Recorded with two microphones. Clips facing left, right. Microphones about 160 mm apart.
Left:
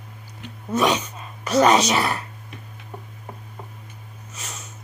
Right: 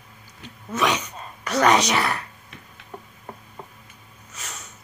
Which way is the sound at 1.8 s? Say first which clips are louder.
Left 1 dB; 25° left (ahead or behind).